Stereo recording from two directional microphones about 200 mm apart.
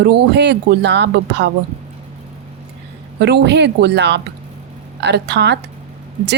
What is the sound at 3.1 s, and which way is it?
A woman's voice, 60° right (ahead or behind).